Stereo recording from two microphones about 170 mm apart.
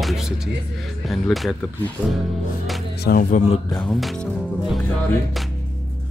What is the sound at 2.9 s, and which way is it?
Speech, 65° left (ahead or behind).